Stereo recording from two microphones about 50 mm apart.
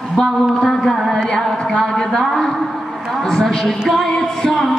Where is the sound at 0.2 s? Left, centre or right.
Centre.